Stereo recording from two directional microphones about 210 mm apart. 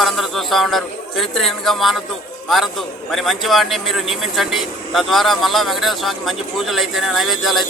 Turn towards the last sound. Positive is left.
turn(degrees=0)  # may be behind; listen again after turning